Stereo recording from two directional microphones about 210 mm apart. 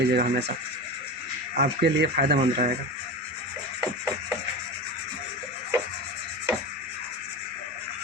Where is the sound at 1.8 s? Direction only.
50° right (ahead or behind).